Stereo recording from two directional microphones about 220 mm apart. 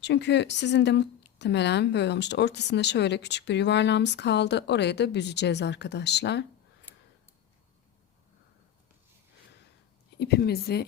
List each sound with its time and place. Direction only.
0.0 s speech: 50° left (ahead or behind)
10.2 s speech: 45° left (ahead or behind)